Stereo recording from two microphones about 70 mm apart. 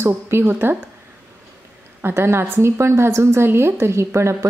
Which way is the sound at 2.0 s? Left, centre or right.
Right.